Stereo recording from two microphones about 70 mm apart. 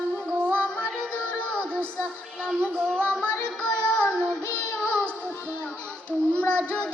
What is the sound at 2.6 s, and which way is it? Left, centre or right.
Child singing, centre.